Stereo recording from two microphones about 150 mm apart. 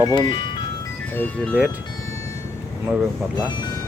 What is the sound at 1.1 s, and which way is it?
Speech, 10° left (ahead or behind).